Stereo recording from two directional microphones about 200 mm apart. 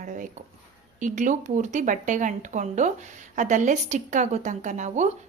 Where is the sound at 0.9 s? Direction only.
40° right (ahead or behind).